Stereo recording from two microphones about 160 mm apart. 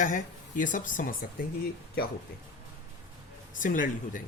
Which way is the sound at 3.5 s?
55° left (ahead or behind).